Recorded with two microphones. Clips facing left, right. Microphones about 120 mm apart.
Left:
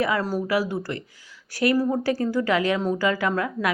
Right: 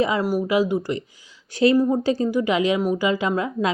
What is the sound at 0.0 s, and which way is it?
A woman's voice, 15° right (ahead or behind).